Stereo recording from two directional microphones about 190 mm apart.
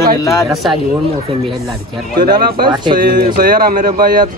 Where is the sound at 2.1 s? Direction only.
50° right (ahead or behind).